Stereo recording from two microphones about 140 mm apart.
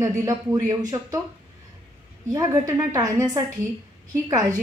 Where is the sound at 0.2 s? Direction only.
25° right (ahead or behind).